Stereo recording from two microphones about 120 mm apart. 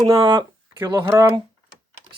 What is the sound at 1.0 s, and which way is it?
Speech, 25° right (ahead or behind).